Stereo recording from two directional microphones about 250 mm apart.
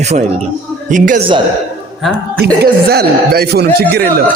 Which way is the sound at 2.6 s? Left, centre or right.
Right.